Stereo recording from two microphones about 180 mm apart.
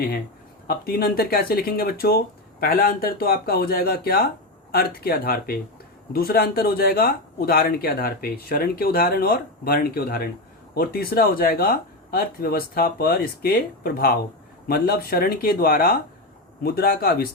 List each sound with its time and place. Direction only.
0.7 s speech: 60° left (ahead or behind)